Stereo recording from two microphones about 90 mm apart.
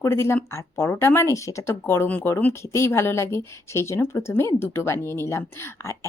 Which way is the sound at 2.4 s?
30° left (ahead or behind).